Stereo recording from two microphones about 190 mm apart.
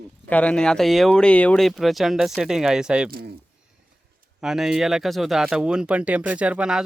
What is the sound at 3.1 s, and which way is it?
Speech, 55° right (ahead or behind).